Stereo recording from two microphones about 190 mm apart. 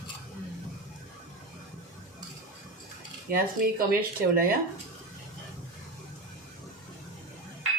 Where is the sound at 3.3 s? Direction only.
50° right (ahead or behind).